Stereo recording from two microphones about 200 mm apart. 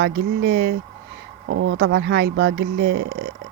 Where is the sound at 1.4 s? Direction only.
90° right; by 3.3 s 55° right (ahead or behind).